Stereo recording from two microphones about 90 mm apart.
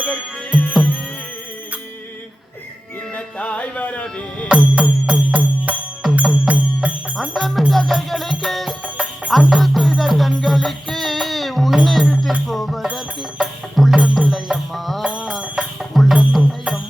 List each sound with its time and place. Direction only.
3.2 s music: 10° left (ahead or behind)
4.4 s music: 10° right (ahead or behind)
7.2 s music: centre (ahead or behind)
8.8 s music: 15° right (ahead or behind)
9.4 s music: centre (ahead or behind)